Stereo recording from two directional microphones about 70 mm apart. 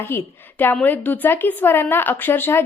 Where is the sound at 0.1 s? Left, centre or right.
Left.